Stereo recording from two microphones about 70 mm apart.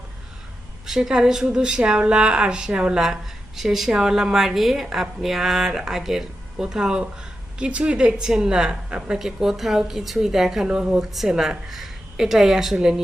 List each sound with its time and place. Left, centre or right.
0.9 s a woman's voice: centre